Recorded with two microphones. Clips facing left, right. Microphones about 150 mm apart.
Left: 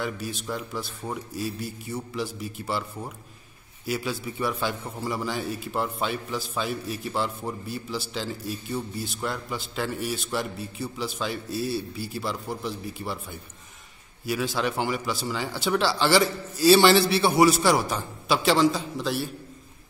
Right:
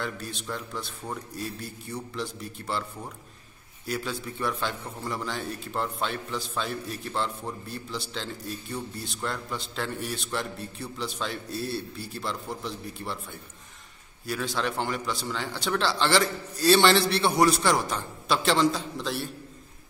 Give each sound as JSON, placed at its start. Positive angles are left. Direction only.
{"t": 0.0, "sound": "a man's voice", "side_deg": 5}